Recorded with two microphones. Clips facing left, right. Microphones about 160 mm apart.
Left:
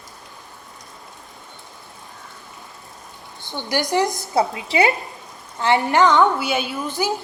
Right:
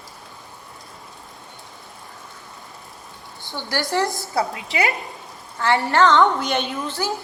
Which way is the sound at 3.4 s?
20° left (ahead or behind).